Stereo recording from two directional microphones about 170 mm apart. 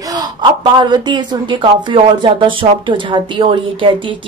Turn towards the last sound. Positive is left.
turn(degrees=-30)  # may be behind; listen again after turning